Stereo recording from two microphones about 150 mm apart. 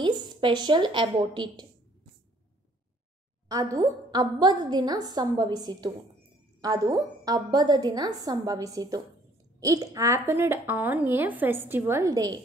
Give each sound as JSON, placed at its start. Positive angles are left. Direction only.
{"t": 0.0, "sound": "a woman's voice", "side_deg": -30}
{"t": 3.4, "sound": "a woman's voice", "side_deg": -25}